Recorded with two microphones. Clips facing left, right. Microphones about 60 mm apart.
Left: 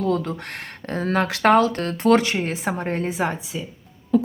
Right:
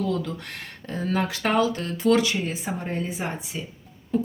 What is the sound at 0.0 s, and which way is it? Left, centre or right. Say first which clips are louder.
Speech: left 4 dB; left.